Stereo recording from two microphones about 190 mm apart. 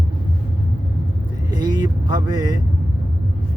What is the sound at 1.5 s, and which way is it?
Vehicle, 20° right (ahead or behind).